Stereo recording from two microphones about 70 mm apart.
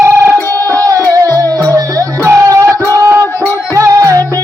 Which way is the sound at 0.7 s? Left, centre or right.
Right.